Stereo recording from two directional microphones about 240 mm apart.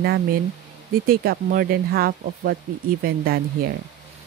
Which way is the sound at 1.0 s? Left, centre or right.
Right.